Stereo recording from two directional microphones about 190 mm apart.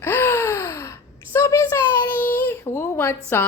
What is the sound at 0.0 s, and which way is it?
Sigh, 10° left (ahead or behind).